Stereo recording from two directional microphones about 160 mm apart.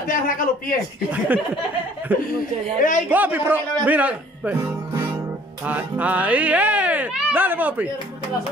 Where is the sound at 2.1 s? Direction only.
10° right (ahead or behind).